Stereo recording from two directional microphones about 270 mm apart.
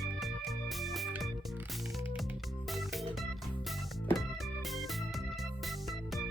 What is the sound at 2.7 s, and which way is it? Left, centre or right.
Music, centre.